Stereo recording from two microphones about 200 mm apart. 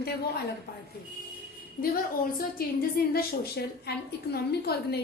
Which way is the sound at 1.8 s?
45° left (ahead or behind).